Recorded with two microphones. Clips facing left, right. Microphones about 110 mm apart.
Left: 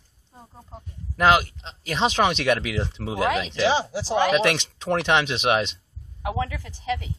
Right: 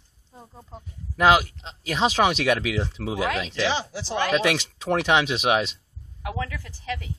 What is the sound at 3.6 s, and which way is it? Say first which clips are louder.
Speech: left 6 dB; 35° left (ahead or behind).